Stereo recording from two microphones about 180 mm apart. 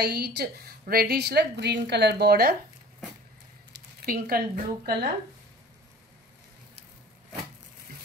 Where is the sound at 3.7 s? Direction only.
55° right (ahead or behind).